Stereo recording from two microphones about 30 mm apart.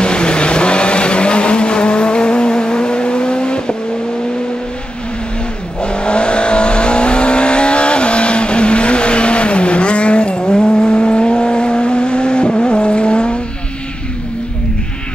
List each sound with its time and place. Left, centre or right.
0.0 s vehicle: left
5.8 s vehicle: left
10.4 s vehicle: left